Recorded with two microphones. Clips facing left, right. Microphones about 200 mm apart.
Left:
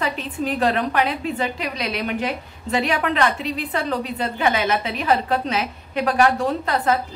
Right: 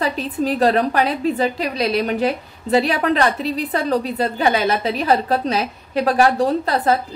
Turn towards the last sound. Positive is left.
turn(degrees=-35)  # may be behind; listen again after turning